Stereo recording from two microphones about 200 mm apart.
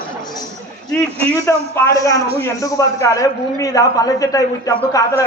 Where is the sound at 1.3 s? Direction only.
15° left (ahead or behind).